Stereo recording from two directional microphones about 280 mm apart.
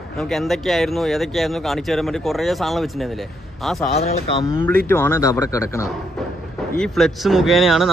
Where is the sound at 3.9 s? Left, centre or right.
Left.